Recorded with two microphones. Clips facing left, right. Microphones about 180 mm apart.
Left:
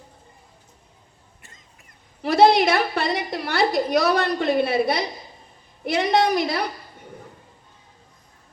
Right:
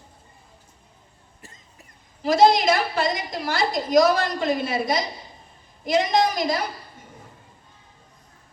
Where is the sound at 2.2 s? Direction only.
60° left (ahead or behind).